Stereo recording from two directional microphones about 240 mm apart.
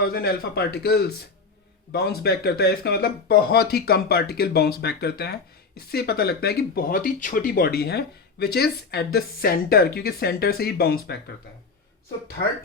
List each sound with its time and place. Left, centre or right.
0.0 s speech: left